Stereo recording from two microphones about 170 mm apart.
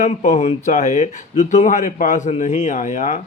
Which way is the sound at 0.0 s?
45° left (ahead or behind).